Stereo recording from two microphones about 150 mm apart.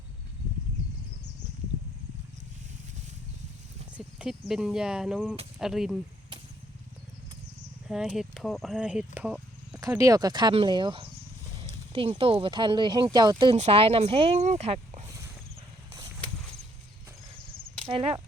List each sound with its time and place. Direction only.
3.9 s speech: 5° right (ahead or behind)
7.9 s speech: 5° right (ahead or behind)
10.0 s speech: 25° right (ahead or behind)
13.6 s speech: 40° right (ahead or behind)
17.8 s speech: 40° right (ahead or behind)